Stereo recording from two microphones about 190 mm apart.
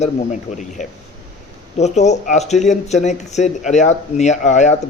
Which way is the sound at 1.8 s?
35° left (ahead or behind).